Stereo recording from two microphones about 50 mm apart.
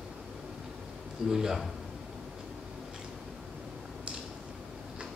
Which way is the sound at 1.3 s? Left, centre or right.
Centre.